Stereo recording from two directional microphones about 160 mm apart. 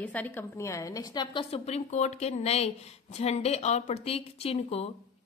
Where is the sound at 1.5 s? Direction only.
45° left (ahead or behind).